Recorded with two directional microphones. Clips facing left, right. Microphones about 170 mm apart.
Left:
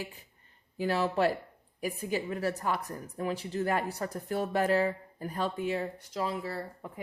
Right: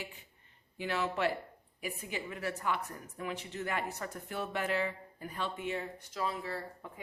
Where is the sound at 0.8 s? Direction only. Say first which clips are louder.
Left 6 dB; 35° left (ahead or behind).